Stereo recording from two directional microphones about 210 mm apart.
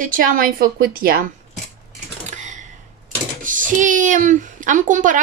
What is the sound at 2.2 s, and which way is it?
Typing, 35° right (ahead or behind).